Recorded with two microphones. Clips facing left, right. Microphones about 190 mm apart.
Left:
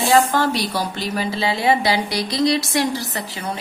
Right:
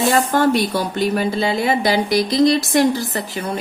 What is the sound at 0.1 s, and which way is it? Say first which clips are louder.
Speech: left 2 dB; 50° right (ahead or behind).